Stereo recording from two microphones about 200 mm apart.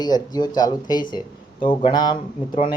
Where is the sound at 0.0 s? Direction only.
20° left (ahead or behind).